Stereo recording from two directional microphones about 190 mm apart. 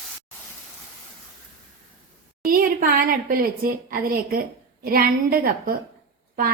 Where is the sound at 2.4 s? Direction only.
50° right (ahead or behind).